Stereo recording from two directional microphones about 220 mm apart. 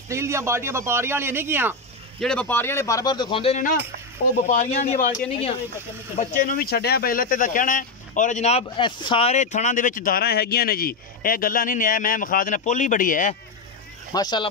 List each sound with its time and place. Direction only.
0.1 s speech: 10° right (ahead or behind)
2.1 s speech: 5° left (ahead or behind); by 13.4 s 35° left (ahead or behind)
14.1 s speech: 20° left (ahead or behind)